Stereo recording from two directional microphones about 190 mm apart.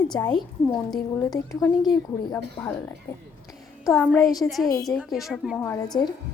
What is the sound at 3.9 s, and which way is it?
Speech, 10° left (ahead or behind).